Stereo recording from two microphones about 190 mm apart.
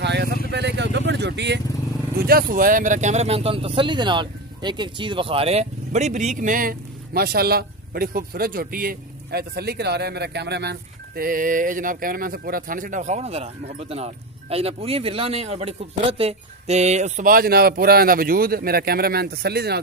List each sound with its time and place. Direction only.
0.0 s vehicle: 60° right (ahead or behind)
2.1 s speech: 50° right (ahead or behind)